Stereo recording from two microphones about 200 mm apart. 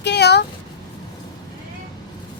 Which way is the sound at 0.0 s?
55° left (ahead or behind).